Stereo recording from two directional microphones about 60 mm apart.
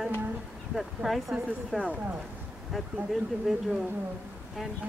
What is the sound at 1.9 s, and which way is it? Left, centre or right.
Speech, centre.